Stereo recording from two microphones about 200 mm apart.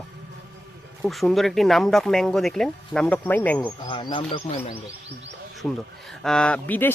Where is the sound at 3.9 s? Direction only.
25° left (ahead or behind).